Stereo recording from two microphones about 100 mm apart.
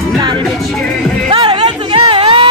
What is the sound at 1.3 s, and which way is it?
Music, 50° right (ahead or behind).